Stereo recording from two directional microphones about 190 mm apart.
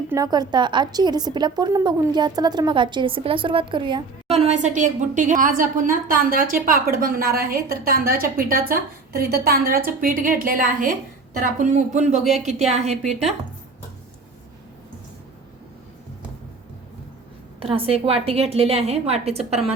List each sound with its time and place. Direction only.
0.1 s a woman's voice: 20° right (ahead or behind)
17.6 s a woman's voice: 30° right (ahead or behind)